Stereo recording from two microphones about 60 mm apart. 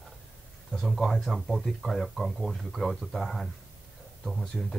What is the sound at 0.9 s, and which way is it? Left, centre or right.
Speech, centre.